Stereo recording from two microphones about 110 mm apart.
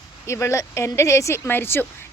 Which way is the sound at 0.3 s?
25° left (ahead or behind).